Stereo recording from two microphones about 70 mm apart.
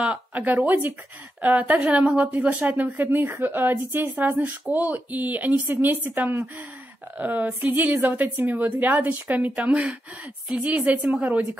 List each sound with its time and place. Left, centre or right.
0.0 s speech: centre